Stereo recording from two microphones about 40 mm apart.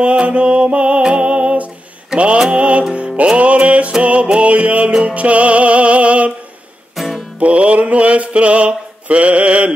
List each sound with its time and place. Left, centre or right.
0.0 s music: right
2.1 s mantra: right
2.5 s music: right
7.0 s music: centre
7.3 s music: right